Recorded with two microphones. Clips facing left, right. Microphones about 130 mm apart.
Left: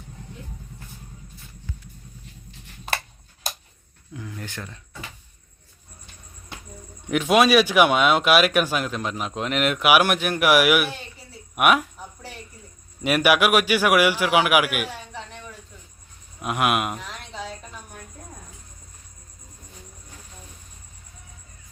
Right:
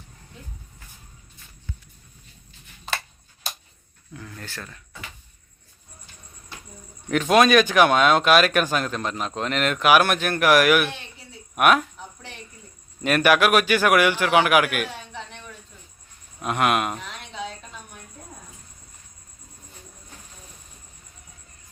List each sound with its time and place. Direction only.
4.1 s speech: 15° left (ahead or behind)
7.1 s speech: 10° left (ahead or behind)
13.0 s speech: 10° left (ahead or behind)
16.4 s a sound: 5° left (ahead or behind)